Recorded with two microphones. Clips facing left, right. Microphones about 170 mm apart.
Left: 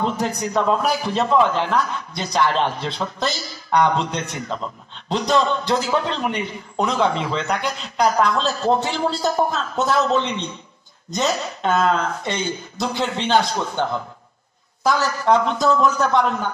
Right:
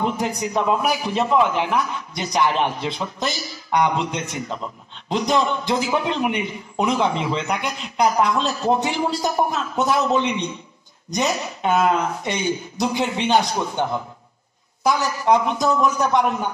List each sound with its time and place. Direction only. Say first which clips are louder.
0.0 s a man's voice: even; 15° right (ahead or behind)